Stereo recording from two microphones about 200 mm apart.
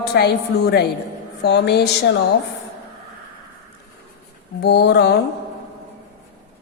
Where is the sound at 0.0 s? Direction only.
55° left (ahead or behind).